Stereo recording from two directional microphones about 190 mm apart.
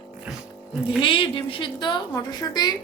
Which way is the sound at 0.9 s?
25° left (ahead or behind).